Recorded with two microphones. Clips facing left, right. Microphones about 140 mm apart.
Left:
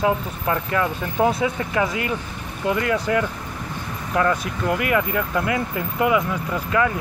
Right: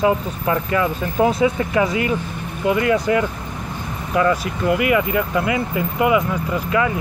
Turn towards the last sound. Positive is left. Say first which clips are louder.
# right 2 dB
turn(degrees=-10)  # may be behind; listen again after turning